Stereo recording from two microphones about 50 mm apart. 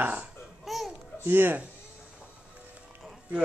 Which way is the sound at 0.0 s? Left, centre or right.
Right.